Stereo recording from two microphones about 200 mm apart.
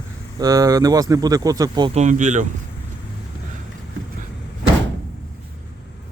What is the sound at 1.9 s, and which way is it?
Speech, 35° right (ahead or behind).